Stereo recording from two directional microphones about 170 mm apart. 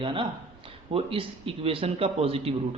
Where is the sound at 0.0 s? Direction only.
30° right (ahead or behind).